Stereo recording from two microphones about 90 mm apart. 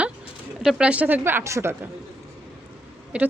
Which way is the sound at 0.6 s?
5° right (ahead or behind).